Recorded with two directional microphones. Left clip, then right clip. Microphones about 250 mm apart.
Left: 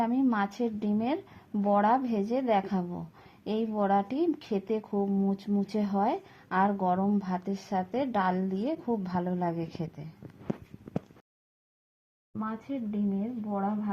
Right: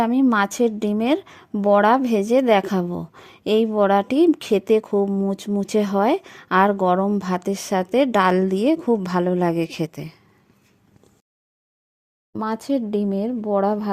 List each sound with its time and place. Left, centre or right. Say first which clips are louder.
0.0 s a woman's voice: right 10 dB; right
12.4 s a woman's voice: right 12 dB; right